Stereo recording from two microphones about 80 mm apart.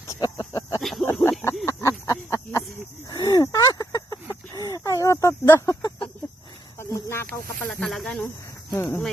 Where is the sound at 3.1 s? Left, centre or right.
Left.